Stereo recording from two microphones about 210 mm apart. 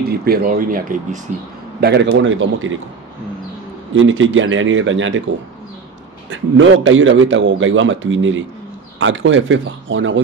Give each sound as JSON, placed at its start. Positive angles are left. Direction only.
{"t": 0.0, "sound": "speech", "side_deg": -45}
{"t": 1.8, "sound": "a man's voice", "side_deg": -55}
{"t": 3.9, "sound": "a man's voice", "side_deg": -70}
{"t": 6.3, "sound": "a man's voice", "side_deg": -65}